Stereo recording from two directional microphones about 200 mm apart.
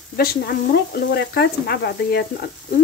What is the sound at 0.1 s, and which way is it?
Stir, 50° left (ahead or behind).